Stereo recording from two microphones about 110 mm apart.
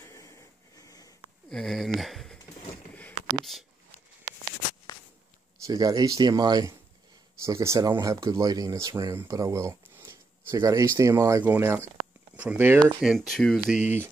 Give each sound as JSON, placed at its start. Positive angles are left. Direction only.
{"t": 0.0, "sound": "a sound", "side_deg": 30}
{"t": 1.5, "sound": "speech", "side_deg": 0}
{"t": 2.9, "sound": "a sound", "side_deg": 15}
{"t": 3.5, "sound": "speech", "side_deg": 0}
{"t": 5.7, "sound": "speech", "side_deg": -35}
{"t": 7.4, "sound": "speech", "side_deg": -25}
{"t": 13.0, "sound": "speech", "side_deg": 0}
{"t": 13.7, "sound": "speech", "side_deg": -20}